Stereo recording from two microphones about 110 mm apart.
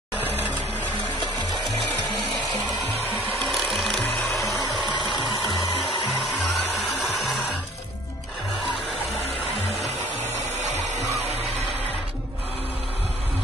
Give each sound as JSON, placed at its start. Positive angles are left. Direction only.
{"t": 1.2, "sound": "music", "side_deg": -45}
{"t": 3.4, "sound": "music", "side_deg": 0}
{"t": 7.1, "sound": "music", "side_deg": 0}
{"t": 10.7, "sound": "music", "side_deg": -90}